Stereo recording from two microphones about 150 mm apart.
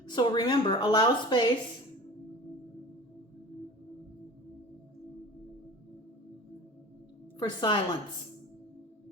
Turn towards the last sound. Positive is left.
turn(degrees=30)  # may be behind; listen again after turning